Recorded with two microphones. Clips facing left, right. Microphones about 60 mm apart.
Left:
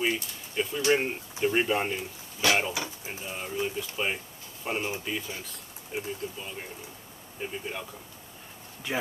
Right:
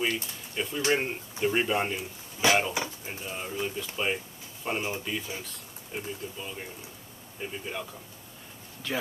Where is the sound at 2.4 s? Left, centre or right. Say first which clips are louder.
Right 2 dB; right.